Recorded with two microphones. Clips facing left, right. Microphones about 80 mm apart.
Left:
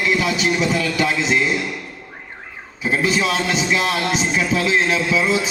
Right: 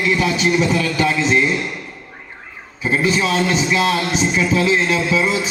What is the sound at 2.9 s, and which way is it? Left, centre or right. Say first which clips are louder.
Speech: right 2 dB; right.